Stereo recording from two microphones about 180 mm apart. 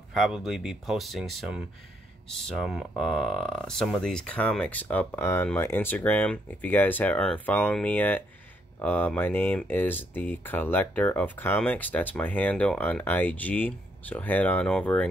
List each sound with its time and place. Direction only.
0.1 s speech: centre (ahead or behind)